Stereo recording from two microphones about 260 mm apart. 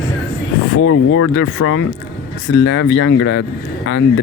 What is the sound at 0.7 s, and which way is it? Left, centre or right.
Speech, left.